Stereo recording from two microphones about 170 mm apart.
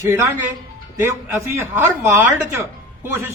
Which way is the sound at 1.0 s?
15° right (ahead or behind).